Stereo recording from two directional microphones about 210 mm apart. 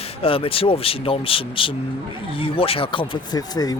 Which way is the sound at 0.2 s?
25° left (ahead or behind).